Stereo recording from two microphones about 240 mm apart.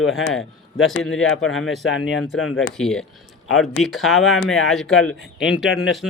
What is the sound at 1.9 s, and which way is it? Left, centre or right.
Speech, left.